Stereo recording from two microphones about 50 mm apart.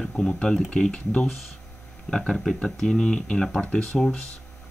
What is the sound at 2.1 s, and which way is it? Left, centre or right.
Speech, centre.